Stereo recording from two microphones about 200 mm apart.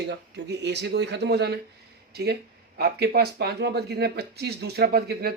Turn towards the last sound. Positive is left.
turn(degrees=-55)  # may be behind; listen again after turning